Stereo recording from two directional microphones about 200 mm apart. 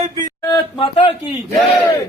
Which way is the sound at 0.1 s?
20° left (ahead or behind).